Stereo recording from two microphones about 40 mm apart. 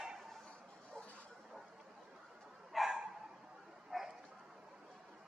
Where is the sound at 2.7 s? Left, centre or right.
Centre.